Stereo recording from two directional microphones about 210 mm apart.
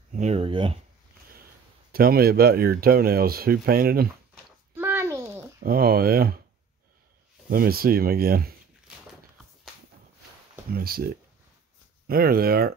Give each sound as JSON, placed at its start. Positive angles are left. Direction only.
{"t": 0.1, "sound": "speech", "side_deg": -35}
{"t": 1.9, "sound": "speech", "side_deg": -45}
{"t": 4.7, "sound": "a sound", "side_deg": -10}
{"t": 5.6, "sound": "speech", "side_deg": -45}
{"t": 7.4, "sound": "speech", "side_deg": -45}
{"t": 10.7, "sound": "speech", "side_deg": -45}